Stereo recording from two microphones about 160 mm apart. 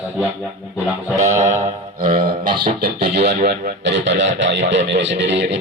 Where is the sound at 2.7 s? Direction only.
65° right (ahead or behind); by 4.3 s 90° right.